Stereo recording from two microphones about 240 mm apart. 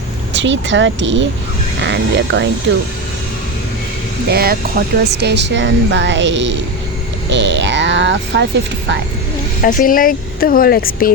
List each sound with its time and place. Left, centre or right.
0.3 s speech: right
4.3 s speech: right
9.6 s speech: left